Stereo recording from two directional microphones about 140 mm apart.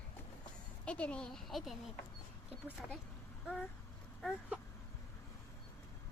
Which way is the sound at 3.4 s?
10° left (ahead or behind).